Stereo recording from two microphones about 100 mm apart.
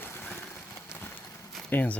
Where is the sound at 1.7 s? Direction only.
15° left (ahead or behind).